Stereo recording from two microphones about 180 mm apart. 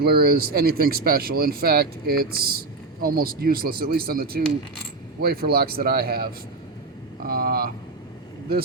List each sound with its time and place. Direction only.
0.0 s speech: 60° right (ahead or behind)
7.3 s speech: 55° right (ahead or behind)